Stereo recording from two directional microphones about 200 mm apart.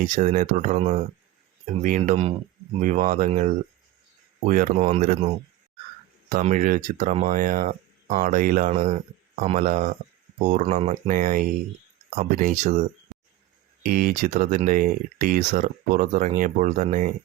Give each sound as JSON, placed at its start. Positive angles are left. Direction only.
{"t": 0.0, "sound": "speech", "side_deg": -40}
{"t": 4.8, "sound": "speech", "side_deg": -30}
{"t": 8.7, "sound": "speech", "side_deg": -35}
{"t": 13.8, "sound": "speech", "side_deg": -45}